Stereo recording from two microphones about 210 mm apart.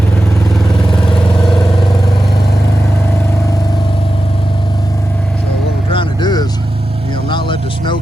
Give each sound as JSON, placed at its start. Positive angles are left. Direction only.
{"t": 5.9, "sound": "vehicle", "side_deg": 20}
{"t": 7.3, "sound": "music", "side_deg": 20}